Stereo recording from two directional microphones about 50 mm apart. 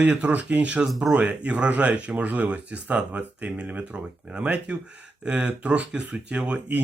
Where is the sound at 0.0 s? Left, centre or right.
Right.